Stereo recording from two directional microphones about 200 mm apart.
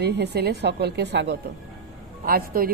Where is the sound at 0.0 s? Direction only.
55° right (ahead or behind).